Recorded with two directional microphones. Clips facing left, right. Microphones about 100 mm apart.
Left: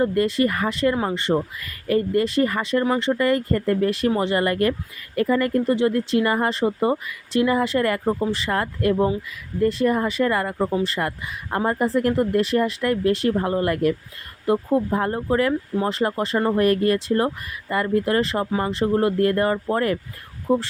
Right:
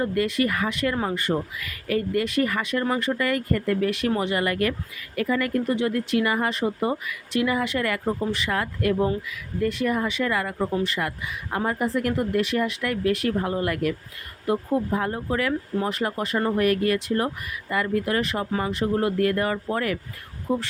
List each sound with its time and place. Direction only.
0.0 s speech: 30° left (ahead or behind)
1.5 s speech: 35° left (ahead or behind)